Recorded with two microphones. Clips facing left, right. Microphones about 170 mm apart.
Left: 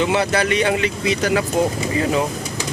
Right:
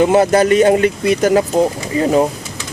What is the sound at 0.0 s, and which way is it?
Speech, 45° right (ahead or behind).